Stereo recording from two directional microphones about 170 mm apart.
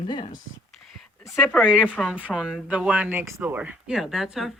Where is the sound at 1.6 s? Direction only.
10° right (ahead or behind).